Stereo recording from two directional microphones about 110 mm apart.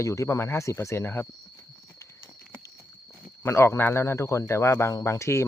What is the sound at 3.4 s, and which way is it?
Speech, 25° left (ahead or behind).